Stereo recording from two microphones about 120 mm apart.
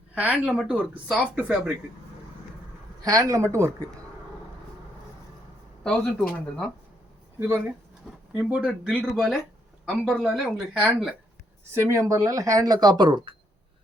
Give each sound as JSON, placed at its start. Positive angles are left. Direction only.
{"t": 0.1, "sound": "speech", "side_deg": -10}
{"t": 3.0, "sound": "speech", "side_deg": -30}
{"t": 5.8, "sound": "speech", "side_deg": 5}
{"t": 7.3, "sound": "speech", "side_deg": -20}
{"t": 8.1, "sound": "a sound", "side_deg": -5}
{"t": 8.4, "sound": "speech", "side_deg": -10}
{"t": 11.7, "sound": "speech", "side_deg": -25}